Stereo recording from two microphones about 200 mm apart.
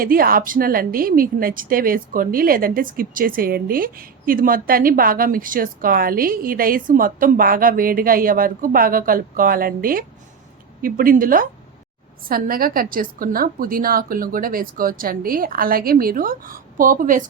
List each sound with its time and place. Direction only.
0.0 s speech: 45° right (ahead or behind)